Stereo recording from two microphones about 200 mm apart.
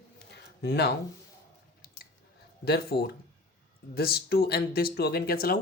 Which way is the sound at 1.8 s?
50° left (ahead or behind).